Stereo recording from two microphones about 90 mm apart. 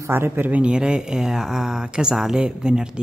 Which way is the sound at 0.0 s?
25° right (ahead or behind).